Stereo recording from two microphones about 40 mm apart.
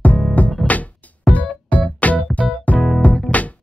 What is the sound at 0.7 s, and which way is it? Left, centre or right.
Music, left.